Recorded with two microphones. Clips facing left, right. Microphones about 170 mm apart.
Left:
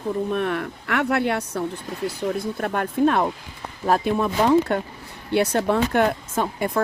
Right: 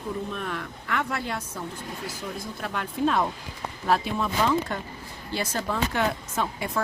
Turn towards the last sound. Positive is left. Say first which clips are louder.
# left 5 dB
turn(degrees=50)  # may be behind; listen again after turning